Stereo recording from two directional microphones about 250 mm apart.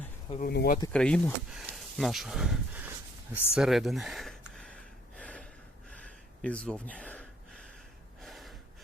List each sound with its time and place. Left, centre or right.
0.3 s speech: left
0.9 s speech: centre
3.5 s gasp: centre
5.9 s a sound: centre
8.2 s gasp: centre